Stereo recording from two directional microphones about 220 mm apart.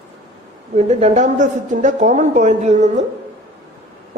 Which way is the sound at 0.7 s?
30° right (ahead or behind).